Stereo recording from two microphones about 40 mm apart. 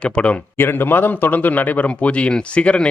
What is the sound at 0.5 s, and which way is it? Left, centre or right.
A man's voice, left.